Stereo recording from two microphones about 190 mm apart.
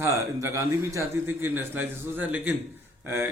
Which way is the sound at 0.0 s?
15° right (ahead or behind).